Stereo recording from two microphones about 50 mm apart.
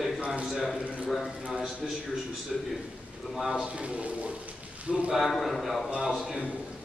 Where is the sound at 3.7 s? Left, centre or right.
Right.